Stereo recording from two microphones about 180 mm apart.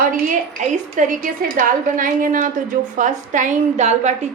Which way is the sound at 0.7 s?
45° right (ahead or behind).